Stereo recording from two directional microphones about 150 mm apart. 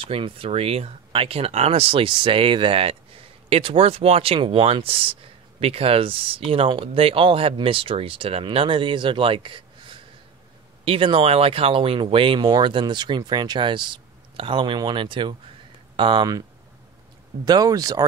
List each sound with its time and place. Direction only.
0.1 s speech: 40° right (ahead or behind)
17.5 s speech: 25° right (ahead or behind)